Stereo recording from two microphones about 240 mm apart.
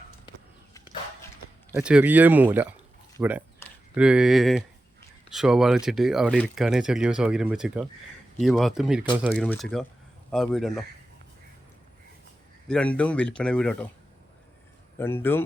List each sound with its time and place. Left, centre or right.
1.7 s speech: centre
12.6 s speech: centre
14.9 s speech: centre